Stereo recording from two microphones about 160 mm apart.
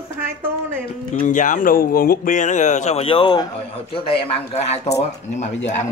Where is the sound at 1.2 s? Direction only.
55° left (ahead or behind).